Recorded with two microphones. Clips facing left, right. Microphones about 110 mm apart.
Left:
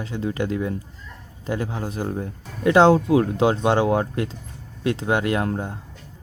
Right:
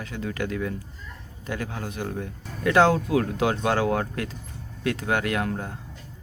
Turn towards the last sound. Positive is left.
turn(degrees=30)  # may be behind; listen again after turning